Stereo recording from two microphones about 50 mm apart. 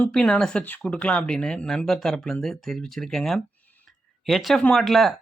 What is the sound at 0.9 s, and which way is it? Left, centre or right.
Speech, left.